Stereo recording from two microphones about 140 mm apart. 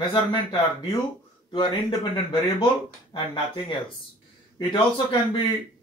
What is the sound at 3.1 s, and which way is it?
Speech, 35° left (ahead or behind).